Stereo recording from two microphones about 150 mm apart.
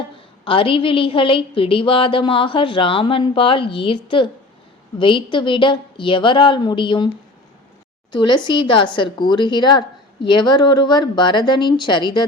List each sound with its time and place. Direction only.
0.4 s a woman's voice: 35° left (ahead or behind)
8.1 s a woman's voice: 30° left (ahead or behind)